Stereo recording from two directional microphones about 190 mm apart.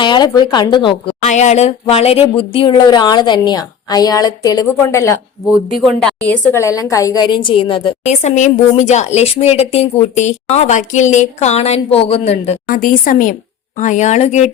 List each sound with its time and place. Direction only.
0.0 s speech: 25° left (ahead or behind)
1.2 s speech: 35° left (ahead or behind); by 5.1 s 15° left (ahead or behind)
5.7 s a woman's voice: centre (ahead or behind); by 14.5 s 35° left (ahead or behind)